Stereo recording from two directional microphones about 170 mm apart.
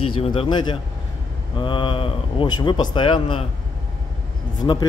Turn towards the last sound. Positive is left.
turn(degrees=25)  # may be behind; listen again after turning